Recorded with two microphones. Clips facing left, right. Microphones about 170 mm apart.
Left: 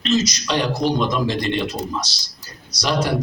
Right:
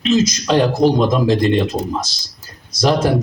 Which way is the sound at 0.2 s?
50° right (ahead or behind).